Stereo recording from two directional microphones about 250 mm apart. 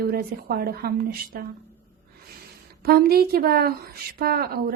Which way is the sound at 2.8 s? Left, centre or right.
Right.